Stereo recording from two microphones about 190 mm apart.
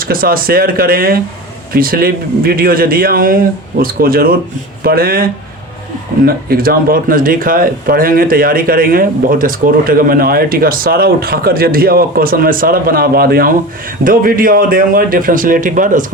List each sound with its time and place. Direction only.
0.0 s speech: 50° right (ahead or behind)